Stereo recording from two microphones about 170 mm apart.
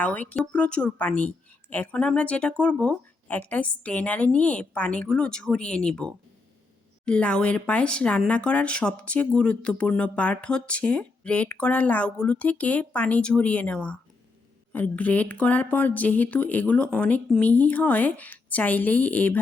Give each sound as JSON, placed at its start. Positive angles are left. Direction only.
{"t": 0.0, "sound": "speech", "side_deg": 10}